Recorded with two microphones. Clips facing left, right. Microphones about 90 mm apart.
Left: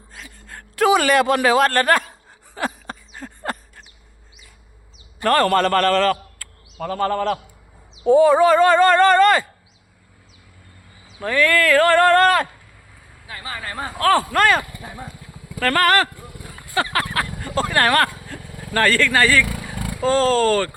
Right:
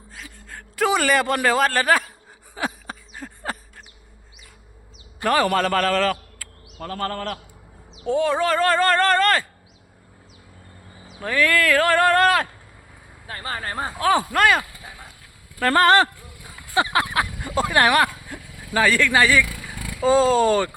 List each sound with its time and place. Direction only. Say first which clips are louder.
0.1 s a man's voice: even; centre (ahead or behind)
2.6 s a sound: left 2 dB; 5° right (ahead or behind)
5.2 s speech: left 3 dB; 5° right (ahead or behind)
6.7 s a man's voice: left 6 dB; 10° left (ahead or behind)
11.2 s speech: left 2 dB; 5° right (ahead or behind)
13.2 s speech: right 2 dB; 40° right (ahead or behind)
14.0 s speech: left 2 dB; 10° right (ahead or behind)
15.6 s speech: right 1 dB; 25° right (ahead or behind)
16.7 s a sound: right 1 dB; 20° right (ahead or behind)
18.4 s vehicle: left 5 dB; 55° left (ahead or behind)
18.7 s speech: left 1 dB; 10° right (ahead or behind)
19.7 s vehicle: left 5 dB; 55° left (ahead or behind)
20.0 s speech: even; 10° right (ahead or behind)